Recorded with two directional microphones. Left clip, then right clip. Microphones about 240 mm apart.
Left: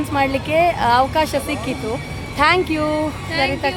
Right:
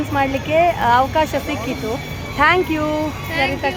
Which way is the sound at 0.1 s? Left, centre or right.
Centre.